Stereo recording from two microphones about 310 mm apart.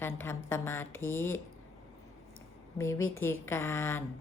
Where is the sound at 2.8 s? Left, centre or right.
Centre.